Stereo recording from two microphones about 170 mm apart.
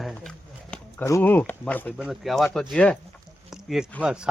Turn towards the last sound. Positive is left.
turn(degrees=-5)  # may be behind; listen again after turning